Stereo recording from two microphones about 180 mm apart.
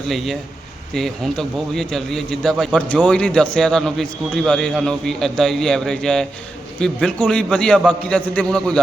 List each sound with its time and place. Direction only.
0.9 s a man's voice: centre (ahead or behind)